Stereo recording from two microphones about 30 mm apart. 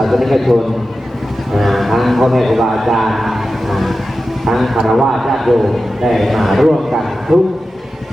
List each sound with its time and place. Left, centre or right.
0.0 s a man's voice: centre
1.5 s a man's voice: centre